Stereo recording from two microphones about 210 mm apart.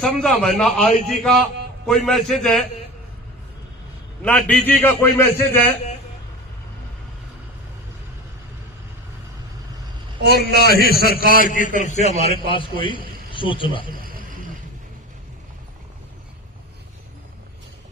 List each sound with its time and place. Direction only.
0.0 s a man's voice: 5° left (ahead or behind)
4.2 s a man's voice: 5° left (ahead or behind)
10.2 s a man's voice: 50° left (ahead or behind)
12.2 s a man's voice: 25° left (ahead or behind)
14.0 s vehicle: 40° right (ahead or behind)